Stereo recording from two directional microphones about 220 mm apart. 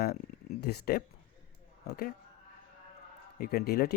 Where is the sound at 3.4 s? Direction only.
45° left (ahead or behind).